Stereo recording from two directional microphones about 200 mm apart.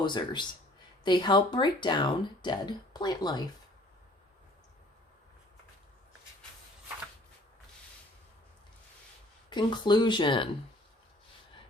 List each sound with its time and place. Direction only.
0.0 s speech: 20° left (ahead or behind)
9.5 s speech: 20° left (ahead or behind)